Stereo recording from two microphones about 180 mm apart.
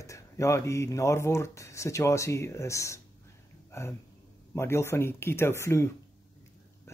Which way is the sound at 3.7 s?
15° left (ahead or behind).